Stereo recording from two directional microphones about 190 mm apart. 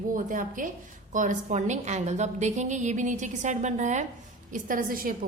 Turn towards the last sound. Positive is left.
turn(degrees=-45)  # may be behind; listen again after turning